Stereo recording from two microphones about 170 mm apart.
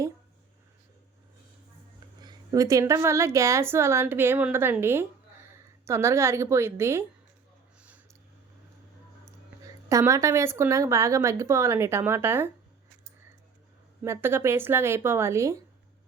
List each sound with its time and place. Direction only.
2.2 s a woman's voice: 20° right (ahead or behind)
7.8 s a sound: 10° right (ahead or behind)
9.6 s a woman's voice: 20° right (ahead or behind)
14.0 s a woman's voice: 15° right (ahead or behind)